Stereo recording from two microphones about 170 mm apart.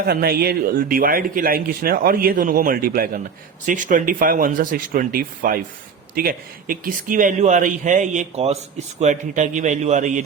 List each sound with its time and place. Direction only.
0.0 s a man's voice: 65° right (ahead or behind); by 10.2 s 45° right (ahead or behind)